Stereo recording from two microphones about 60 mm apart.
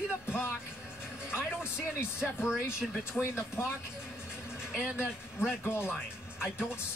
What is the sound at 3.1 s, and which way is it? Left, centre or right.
Speech, centre.